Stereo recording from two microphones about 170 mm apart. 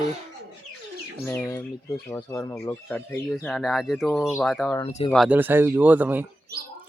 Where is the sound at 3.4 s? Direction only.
Centre (ahead or behind).